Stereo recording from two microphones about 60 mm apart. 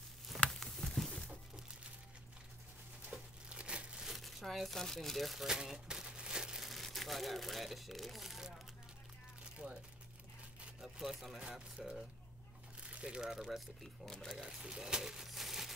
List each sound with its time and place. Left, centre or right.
0.3 s a sound: centre
3.1 s crumpling: centre
4.1 s speech: centre
5.6 s crumpling: centre
6.7 s speech: centre
9.4 s a sound: centre
10.8 s speech: centre
12.8 s crumpling: centre
14.0 s speech: centre
14.4 s speech: centre